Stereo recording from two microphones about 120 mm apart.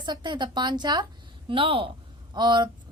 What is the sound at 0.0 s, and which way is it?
A woman's voice, 40° right (ahead or behind).